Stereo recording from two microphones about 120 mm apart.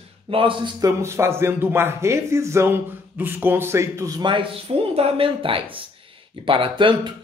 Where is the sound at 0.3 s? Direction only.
45° right (ahead or behind).